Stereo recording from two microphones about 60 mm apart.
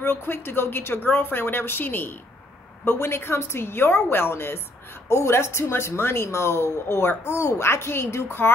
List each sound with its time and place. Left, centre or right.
0.0 s a woman's voice: left